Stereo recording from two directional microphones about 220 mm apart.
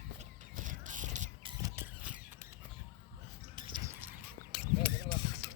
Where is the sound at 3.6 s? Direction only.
20° right (ahead or behind).